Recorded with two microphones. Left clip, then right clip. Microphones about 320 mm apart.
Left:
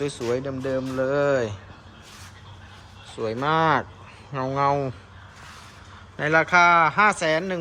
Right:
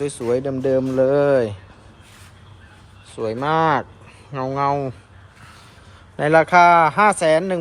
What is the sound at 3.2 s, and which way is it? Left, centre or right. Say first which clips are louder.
Speech: right 3 dB; centre.